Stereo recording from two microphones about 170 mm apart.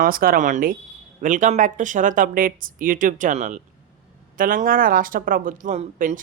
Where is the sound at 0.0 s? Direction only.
55° right (ahead or behind).